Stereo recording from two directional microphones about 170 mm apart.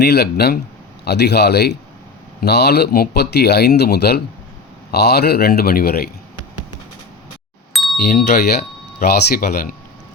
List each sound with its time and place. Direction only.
0.0 s speech: 70° left (ahead or behind)
7.7 s doorbell: centre (ahead or behind)
8.0 s speech: 60° left (ahead or behind)